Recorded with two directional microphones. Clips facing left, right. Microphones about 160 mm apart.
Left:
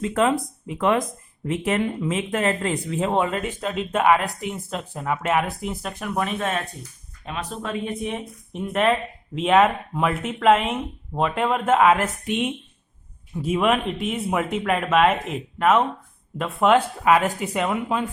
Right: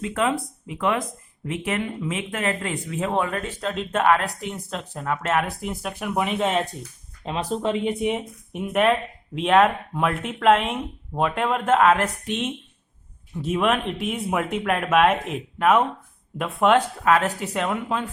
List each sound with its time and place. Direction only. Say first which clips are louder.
0.0 s speech: left 3 dB; 40° left (ahead or behind); by 3.5 s 20° left (ahead or behind)
3.6 s speech: even; 5° left (ahead or behind); by 8.2 s 15° right (ahead or behind)
8.5 s a woman's voice: right 1 dB; 5° right (ahead or behind)